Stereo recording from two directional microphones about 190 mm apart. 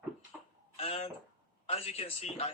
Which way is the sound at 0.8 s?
30° left (ahead or behind).